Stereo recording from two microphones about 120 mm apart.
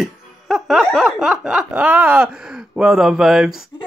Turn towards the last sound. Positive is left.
turn(degrees=-5)  # may be behind; listen again after turning